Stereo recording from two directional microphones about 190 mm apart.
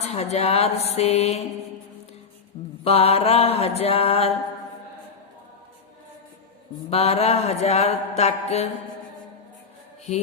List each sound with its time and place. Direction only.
0.0 s mantra: 35° left (ahead or behind)
2.8 s mantra: 30° left (ahead or behind)
6.9 s mantra: 30° left (ahead or behind)